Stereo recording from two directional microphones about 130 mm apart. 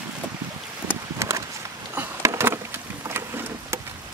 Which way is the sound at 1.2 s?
20° right (ahead or behind).